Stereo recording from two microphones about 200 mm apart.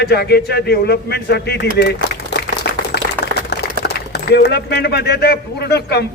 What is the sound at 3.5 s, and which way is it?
Speech, 55° left (ahead or behind).